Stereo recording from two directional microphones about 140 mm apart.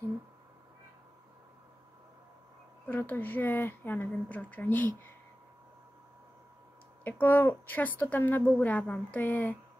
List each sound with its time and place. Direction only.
2.9 s a woman's voice: 15° left (ahead or behind)
7.1 s a woman's voice: 10° left (ahead or behind)